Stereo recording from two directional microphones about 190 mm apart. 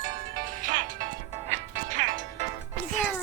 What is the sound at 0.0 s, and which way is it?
Music, 45° right (ahead or behind).